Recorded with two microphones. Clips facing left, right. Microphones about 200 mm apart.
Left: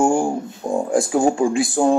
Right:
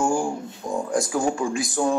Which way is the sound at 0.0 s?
30° left (ahead or behind).